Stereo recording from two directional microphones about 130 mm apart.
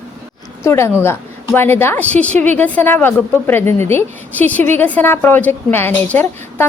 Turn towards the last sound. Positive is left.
turn(degrees=15)  # may be behind; listen again after turning